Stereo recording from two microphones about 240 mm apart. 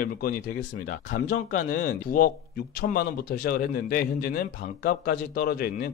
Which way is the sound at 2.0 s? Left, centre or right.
Left.